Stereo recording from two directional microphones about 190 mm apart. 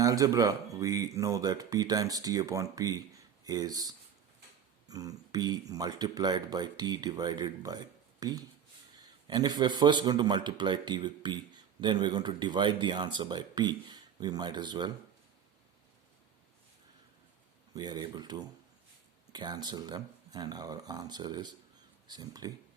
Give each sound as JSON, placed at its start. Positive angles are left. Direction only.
{"t": 0.0, "sound": "a man's voice", "side_deg": -15}
{"t": 17.7, "sound": "a man's voice", "side_deg": -20}